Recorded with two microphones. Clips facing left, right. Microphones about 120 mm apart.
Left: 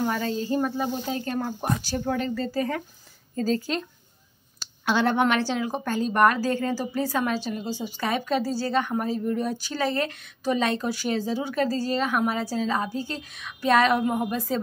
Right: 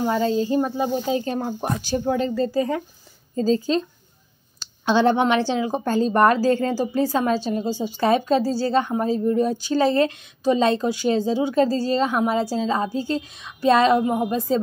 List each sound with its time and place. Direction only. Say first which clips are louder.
0.0 s a woman's voice: right 6 dB; 20° right (ahead or behind)